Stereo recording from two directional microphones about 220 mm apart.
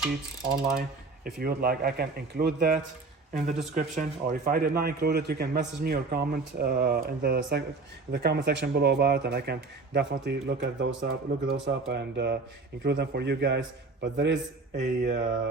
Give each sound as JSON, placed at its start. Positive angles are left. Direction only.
{"t": 0.8, "sound": "a man's voice", "side_deg": -45}
{"t": 14.7, "sound": "mantra", "side_deg": -35}